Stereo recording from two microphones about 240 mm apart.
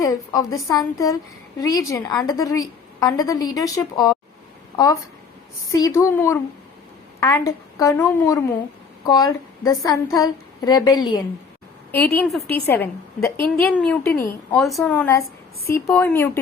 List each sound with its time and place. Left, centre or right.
0.0 s a woman's voice: centre
7.4 s a woman's voice: centre
12.1 s a woman's voice: centre